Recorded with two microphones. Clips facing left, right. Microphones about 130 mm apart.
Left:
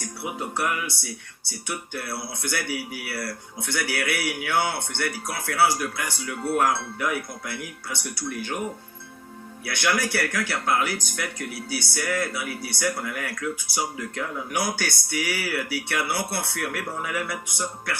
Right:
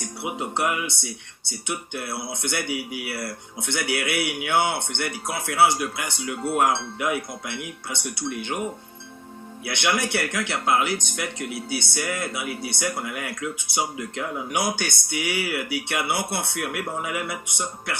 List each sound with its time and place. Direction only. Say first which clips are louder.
0.0 s speech: right 2 dB; 20° right (ahead or behind)
9.6 s speech: right 1 dB; 25° right (ahead or behind)